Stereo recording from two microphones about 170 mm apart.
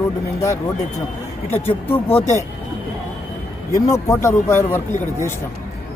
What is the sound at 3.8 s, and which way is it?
Speech, 20° left (ahead or behind).